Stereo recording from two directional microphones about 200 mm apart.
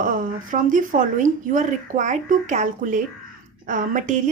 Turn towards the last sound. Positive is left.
turn(degrees=-40)  # may be behind; listen again after turning